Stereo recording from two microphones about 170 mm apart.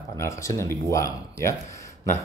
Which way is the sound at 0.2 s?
15° left (ahead or behind).